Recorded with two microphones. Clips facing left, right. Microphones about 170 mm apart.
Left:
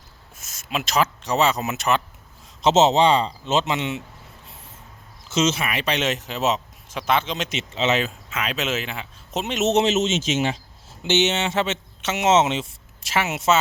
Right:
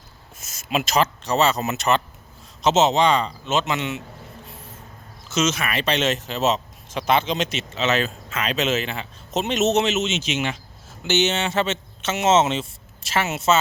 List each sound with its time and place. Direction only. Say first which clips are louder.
0.3 s speech: right 4 dB; centre (ahead or behind)
1.0 s speech: right 1 dB; 15° left (ahead or behind)
2.6 s a man's voice: left 1 dB; 30° left (ahead or behind)
5.3 s a man's voice: left 1 dB; 30° left (ahead or behind)
5.6 s speech: right 2 dB; 15° left (ahead or behind)
7.0 s speech: right 2 dB; centre (ahead or behind)
7.5 s a man's voice: even; 25° left (ahead or behind)
8.0 s speech: right 2 dB; 10° left (ahead or behind)
9.7 s speech: left 2 dB; 35° left (ahead or behind)
11.0 s speech: even; 25° left (ahead or behind)